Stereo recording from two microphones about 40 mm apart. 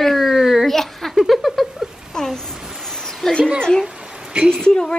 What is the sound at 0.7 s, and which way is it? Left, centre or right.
Speech, centre.